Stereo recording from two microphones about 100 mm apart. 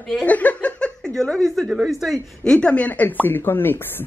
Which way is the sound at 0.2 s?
15° left (ahead or behind).